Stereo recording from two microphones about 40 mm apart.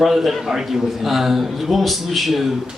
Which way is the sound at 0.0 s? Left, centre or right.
Centre.